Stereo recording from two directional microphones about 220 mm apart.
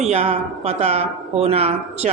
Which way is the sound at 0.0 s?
30° right (ahead or behind).